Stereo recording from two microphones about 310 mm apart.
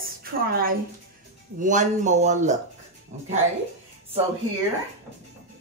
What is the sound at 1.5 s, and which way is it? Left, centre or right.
Speech, right.